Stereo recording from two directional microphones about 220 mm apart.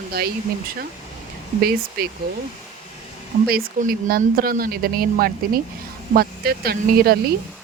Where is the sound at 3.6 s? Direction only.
40° right (ahead or behind).